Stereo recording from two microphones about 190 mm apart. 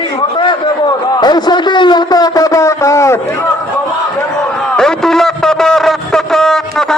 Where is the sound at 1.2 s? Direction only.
20° left (ahead or behind).